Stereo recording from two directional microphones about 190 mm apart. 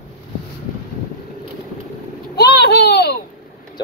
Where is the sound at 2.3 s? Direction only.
60° left (ahead or behind).